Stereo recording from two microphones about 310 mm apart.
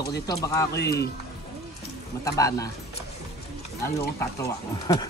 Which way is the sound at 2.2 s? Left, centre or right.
Centre.